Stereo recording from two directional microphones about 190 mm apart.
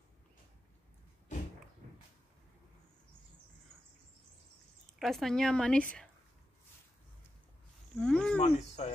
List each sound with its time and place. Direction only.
4.9 s speech: centre (ahead or behind)
7.9 s a sound: 5° left (ahead or behind)
8.4 s speech: 35° left (ahead or behind)